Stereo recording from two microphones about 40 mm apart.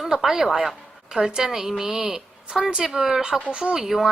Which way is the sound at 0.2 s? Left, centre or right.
Centre.